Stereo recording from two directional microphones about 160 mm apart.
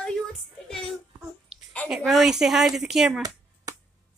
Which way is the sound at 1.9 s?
Centre (ahead or behind).